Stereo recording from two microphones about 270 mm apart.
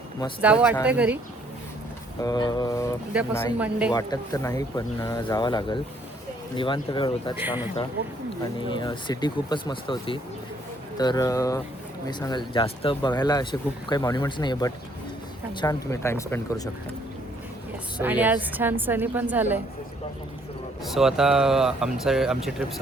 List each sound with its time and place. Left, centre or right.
0.4 s speech: centre
2.2 s speech: centre
3.6 s speech: centre
3.9 s speech: centre
8.7 s speech: centre
18.0 s a woman's voice: centre
20.8 s speech: centre